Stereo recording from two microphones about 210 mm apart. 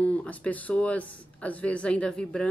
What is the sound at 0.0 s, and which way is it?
A woman's voice, 5° left (ahead or behind).